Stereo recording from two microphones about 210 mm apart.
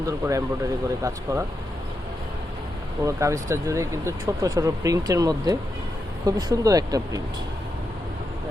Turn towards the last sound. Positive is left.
turn(degrees=-15)  # may be behind; listen again after turning